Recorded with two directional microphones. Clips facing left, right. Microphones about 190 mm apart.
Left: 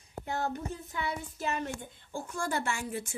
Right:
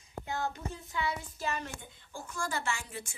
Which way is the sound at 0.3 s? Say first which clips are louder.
Left 3 dB; 55° left (ahead or behind).